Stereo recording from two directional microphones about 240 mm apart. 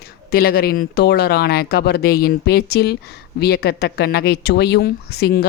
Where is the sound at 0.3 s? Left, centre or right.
Left.